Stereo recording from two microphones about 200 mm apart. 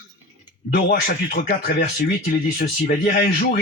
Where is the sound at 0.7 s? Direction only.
55° left (ahead or behind).